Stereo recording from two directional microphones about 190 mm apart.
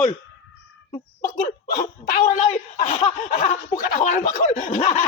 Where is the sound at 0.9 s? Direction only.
45° left (ahead or behind).